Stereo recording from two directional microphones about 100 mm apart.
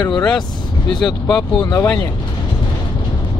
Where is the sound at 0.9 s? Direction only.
5° left (ahead or behind).